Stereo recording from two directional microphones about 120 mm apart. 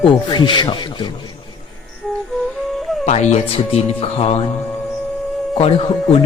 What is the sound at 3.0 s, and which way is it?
Speech, 70° left (ahead or behind).